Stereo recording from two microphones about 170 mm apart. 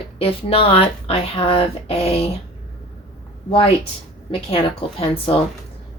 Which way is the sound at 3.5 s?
30° left (ahead or behind).